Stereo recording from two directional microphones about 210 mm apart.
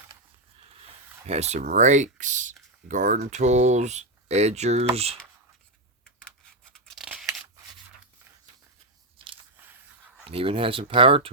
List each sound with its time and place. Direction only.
1.3 s speech: 30° right (ahead or behind)
6.1 s a sound: 5° left (ahead or behind)
6.7 s tearing: centre (ahead or behind)
9.1 s biting: 25° right (ahead or behind)
10.2 s speech: 25° right (ahead or behind)